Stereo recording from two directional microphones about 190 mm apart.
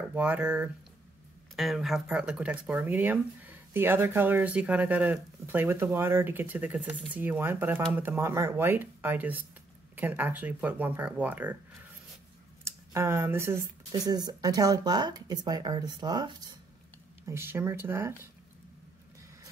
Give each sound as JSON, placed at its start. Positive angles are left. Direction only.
{"t": 0.1, "sound": "speech", "side_deg": -10}